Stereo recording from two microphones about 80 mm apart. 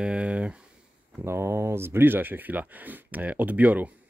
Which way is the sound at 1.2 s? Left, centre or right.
Right.